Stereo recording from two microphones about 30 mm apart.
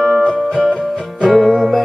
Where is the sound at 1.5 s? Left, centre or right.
Centre.